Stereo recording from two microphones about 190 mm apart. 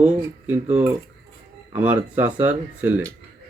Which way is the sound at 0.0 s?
10° right (ahead or behind).